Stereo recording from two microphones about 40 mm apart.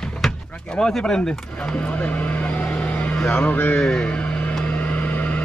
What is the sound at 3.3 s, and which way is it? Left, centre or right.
Mantra, left.